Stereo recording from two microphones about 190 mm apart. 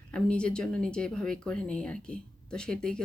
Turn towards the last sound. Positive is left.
turn(degrees=5)  # may be behind; listen again after turning